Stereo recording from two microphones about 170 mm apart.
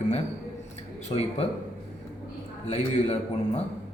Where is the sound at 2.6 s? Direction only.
40° left (ahead or behind).